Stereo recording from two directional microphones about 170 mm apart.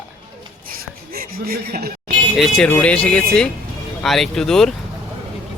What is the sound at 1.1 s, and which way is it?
Speech, 60° right (ahead or behind).